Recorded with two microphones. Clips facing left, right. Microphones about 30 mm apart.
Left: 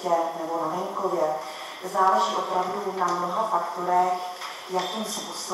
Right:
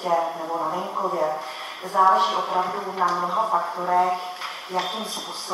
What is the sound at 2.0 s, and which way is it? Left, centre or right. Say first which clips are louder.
Speech: right 3 dB; right.